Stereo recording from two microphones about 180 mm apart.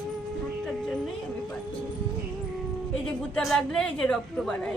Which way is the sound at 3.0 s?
5° left (ahead or behind).